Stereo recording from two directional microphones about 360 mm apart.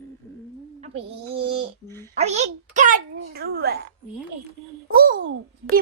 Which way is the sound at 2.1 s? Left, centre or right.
Centre.